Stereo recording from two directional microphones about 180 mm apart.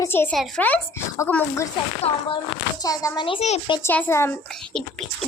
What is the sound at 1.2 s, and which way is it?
Music, 10° left (ahead or behind).